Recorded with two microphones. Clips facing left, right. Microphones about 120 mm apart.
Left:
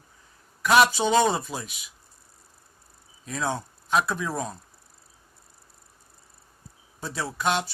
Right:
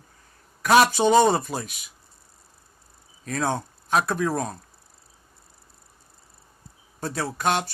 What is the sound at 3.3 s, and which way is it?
Speech, 55° right (ahead or behind).